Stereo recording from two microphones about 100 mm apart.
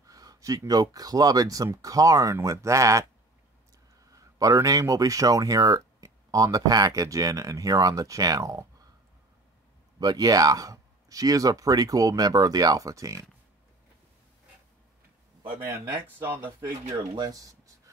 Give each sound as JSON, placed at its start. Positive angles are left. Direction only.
{"t": 0.0, "sound": "speech", "side_deg": -35}
{"t": 4.1, "sound": "speech", "side_deg": -35}
{"t": 9.9, "sound": "speech", "side_deg": -40}
{"t": 17.1, "sound": "a sound", "side_deg": -40}